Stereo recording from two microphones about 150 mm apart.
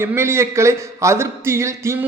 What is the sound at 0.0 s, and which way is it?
A man's voice, 15° right (ahead or behind).